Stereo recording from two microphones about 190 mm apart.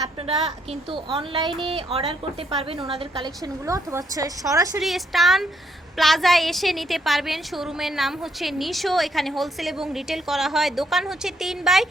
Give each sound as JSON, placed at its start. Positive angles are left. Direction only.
{"t": 0.2, "sound": "a sound", "side_deg": -30}
{"t": 0.7, "sound": "a woman's voice", "side_deg": -25}
{"t": 3.6, "sound": "a woman's voice", "side_deg": -15}
{"t": 4.8, "sound": "a woman's voice", "side_deg": 0}